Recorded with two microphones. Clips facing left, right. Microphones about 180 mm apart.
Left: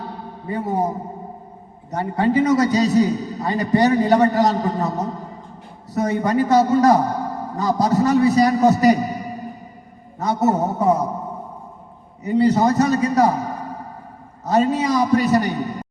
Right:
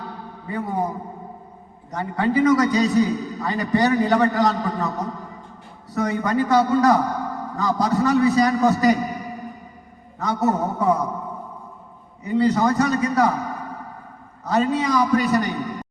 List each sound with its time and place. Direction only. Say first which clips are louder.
0.0 s a sound: left 3 dB; 25° left (ahead or behind)
1.9 s a man's voice: left 3 dB; 25° left (ahead or behind)
12.4 s a man's voice: left 2 dB; 25° left (ahead or behind)